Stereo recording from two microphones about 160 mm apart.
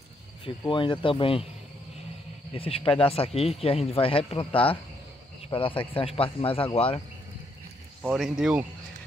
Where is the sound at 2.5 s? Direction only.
35° left (ahead or behind).